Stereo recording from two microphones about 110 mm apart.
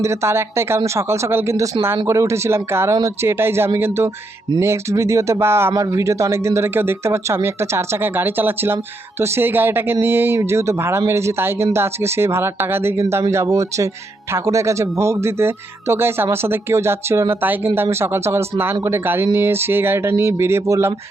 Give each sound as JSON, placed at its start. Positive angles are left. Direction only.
{"t": 0.0, "sound": "speech", "side_deg": -25}